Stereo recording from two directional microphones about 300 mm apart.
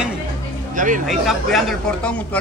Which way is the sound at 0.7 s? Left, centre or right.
Right.